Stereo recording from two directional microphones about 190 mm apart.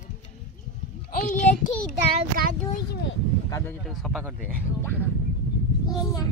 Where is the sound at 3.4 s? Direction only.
15° left (ahead or behind).